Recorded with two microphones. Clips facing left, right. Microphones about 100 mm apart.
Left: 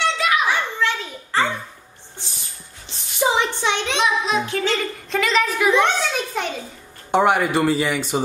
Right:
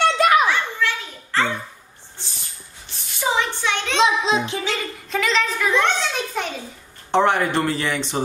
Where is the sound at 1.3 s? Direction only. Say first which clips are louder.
Left 1 dB; 15° left (ahead or behind).